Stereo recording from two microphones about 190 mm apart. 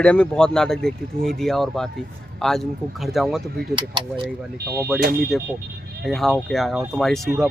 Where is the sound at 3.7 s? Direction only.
25° right (ahead or behind).